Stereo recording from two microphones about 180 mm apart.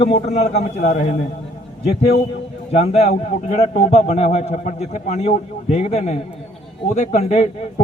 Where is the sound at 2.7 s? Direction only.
35° left (ahead or behind).